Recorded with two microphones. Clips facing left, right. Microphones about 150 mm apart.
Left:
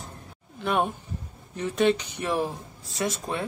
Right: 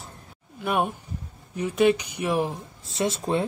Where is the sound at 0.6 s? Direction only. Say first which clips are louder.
Even; 10° right (ahead or behind).